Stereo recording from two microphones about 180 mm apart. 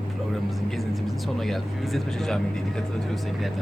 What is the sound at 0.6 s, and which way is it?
Speech, centre (ahead or behind).